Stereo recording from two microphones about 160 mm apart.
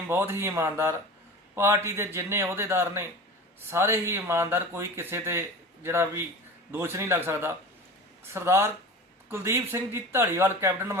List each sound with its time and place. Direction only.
0.1 s speech: 15° right (ahead or behind)